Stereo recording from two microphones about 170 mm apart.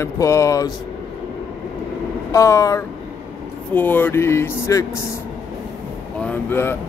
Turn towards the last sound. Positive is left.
turn(degrees=15)  # may be behind; listen again after turning